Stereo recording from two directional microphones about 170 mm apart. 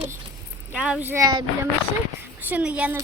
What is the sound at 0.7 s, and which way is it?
Speech, 10° right (ahead or behind).